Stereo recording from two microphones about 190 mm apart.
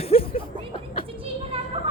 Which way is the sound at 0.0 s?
30° left (ahead or behind).